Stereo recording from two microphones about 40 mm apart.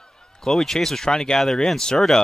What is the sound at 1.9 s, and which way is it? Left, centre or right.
Speech, centre.